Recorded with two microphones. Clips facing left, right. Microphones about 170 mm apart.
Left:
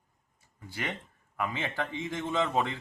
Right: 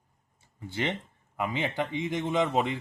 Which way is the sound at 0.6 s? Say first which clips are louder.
Right 6 dB; 25° right (ahead or behind).